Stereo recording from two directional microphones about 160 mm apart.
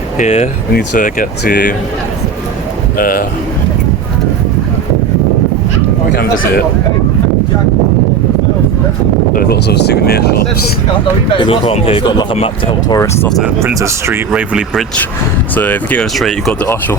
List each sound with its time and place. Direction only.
0.2 s speech: 45° left (ahead or behind)
0.7 s speech: 65° left (ahead or behind)
3.0 s a man's voice: 65° left (ahead or behind)
6.1 s a man's voice: 65° left (ahead or behind)
9.3 s speech: 75° left (ahead or behind)
11.3 s speech: 35° left (ahead or behind)
13.6 s speech: 15° right (ahead or behind)
14.3 s speech: 5° right (ahead or behind)
15.5 s speech: 10° left (ahead or behind)